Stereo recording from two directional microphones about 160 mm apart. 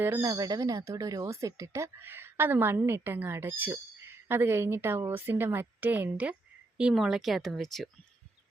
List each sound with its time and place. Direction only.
0.2 s speech: 25° right (ahead or behind); by 7.9 s centre (ahead or behind)